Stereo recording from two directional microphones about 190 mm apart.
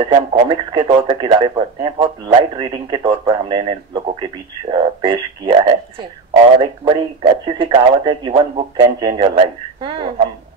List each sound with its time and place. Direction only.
0.0 s speech: 25° right (ahead or behind)